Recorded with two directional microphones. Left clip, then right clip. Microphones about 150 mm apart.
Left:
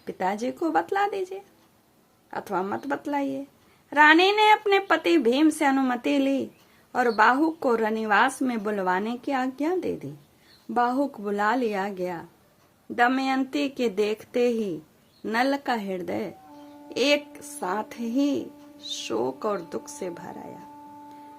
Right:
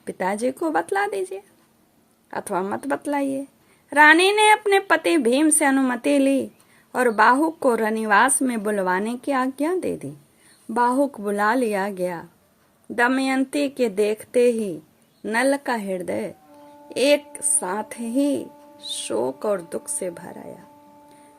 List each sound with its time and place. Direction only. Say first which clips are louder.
0.0 s a woman's voice: right 4 dB; 25° right (ahead or behind)